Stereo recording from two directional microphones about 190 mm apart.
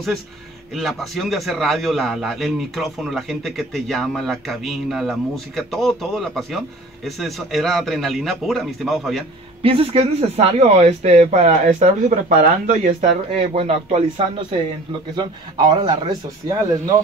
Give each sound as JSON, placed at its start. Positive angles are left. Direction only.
{"t": 0.7, "sound": "a man's voice", "side_deg": 0}
{"t": 9.6, "sound": "speech", "side_deg": -30}
{"t": 13.3, "sound": "a man's voice", "side_deg": -30}